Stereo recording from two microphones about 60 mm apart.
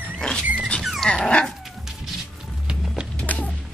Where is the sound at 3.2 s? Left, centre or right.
Left.